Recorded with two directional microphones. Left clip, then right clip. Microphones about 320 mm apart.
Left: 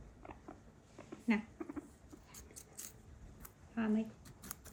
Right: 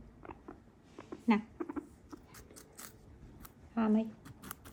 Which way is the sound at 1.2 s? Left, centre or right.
Centre.